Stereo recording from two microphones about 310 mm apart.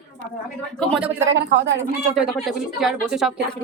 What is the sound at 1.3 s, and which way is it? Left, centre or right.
Speech, right.